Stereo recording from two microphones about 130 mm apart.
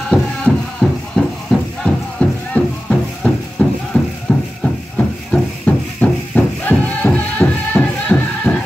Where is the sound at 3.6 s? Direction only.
10° left (ahead or behind).